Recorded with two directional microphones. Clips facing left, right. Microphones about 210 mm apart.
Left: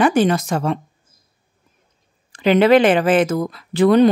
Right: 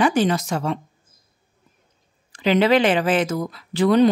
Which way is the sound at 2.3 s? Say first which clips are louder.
Left 4 dB; 55° left (ahead or behind).